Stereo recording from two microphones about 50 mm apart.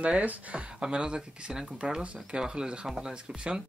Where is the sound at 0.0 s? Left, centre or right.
Right.